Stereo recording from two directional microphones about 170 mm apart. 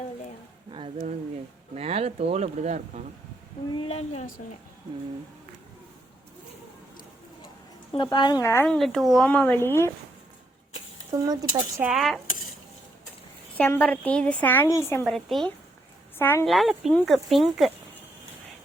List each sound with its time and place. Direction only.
0.7 s speech: 30° right (ahead or behind)
3.8 s a woman's voice: 35° left (ahead or behind)
7.9 s a woman's voice: 25° left (ahead or behind)
8.6 s a woman's voice: 5° left (ahead or behind)
11.1 s speech: 20° right (ahead or behind)
11.8 s speech: centre (ahead or behind)
13.6 s a woman's voice: 10° left (ahead or behind)
15.0 s speech: centre (ahead or behind)
16.1 s a woman's voice: 15° left (ahead or behind)
16.5 s speech: centre (ahead or behind)